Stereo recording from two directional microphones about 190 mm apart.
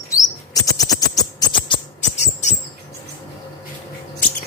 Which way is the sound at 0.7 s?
20° left (ahead or behind).